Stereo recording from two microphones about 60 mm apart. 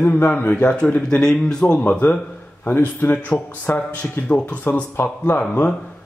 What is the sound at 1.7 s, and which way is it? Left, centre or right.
Speech, left.